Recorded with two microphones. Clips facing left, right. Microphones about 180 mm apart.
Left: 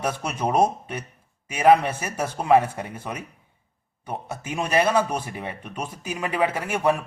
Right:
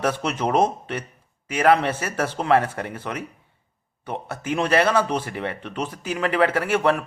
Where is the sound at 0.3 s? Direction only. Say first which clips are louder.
Left 1 dB; 10° left (ahead or behind).